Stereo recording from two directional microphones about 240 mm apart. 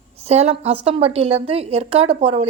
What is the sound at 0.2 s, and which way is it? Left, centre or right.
A woman's voice, right.